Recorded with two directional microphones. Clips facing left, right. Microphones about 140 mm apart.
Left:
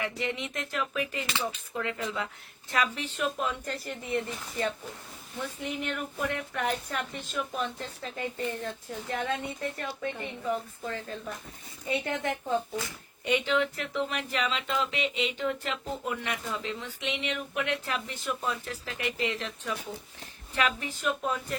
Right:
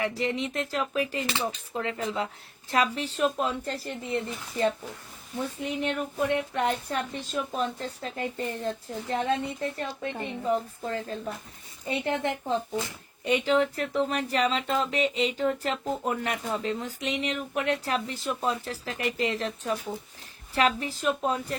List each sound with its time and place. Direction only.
0.0 s speech: 35° right (ahead or behind)
5.8 s speech: 30° right (ahead or behind)